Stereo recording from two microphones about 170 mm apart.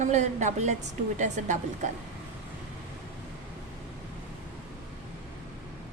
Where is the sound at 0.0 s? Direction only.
45° right (ahead or behind).